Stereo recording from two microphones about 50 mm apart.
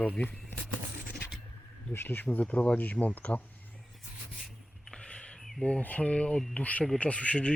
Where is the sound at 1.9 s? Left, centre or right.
Left.